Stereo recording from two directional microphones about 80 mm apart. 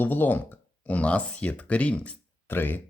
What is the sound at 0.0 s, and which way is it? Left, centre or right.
Speech, left.